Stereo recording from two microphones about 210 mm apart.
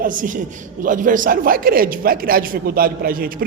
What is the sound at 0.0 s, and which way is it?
A man's voice, 40° right (ahead or behind).